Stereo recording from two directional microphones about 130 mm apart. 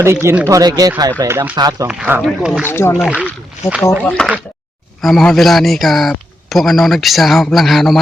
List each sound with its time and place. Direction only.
0.0 s speech: 20° right (ahead or behind)
1.9 s speech: 10° right (ahead or behind)
2.6 s speech: 20° left (ahead or behind)
3.6 s speech: 65° left (ahead or behind)
4.0 s speech: 10° left (ahead or behind)